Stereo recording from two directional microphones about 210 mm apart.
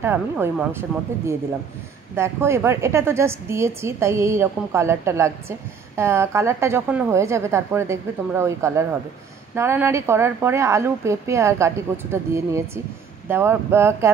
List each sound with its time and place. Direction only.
0.0 s a woman's voice: 10° right (ahead or behind)